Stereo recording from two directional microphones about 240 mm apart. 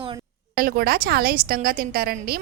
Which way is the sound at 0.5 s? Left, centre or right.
Right.